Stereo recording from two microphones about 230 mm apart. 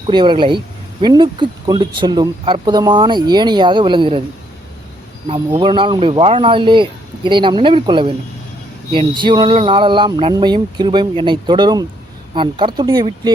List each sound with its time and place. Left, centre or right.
0.1 s speech: centre
5.5 s speech: right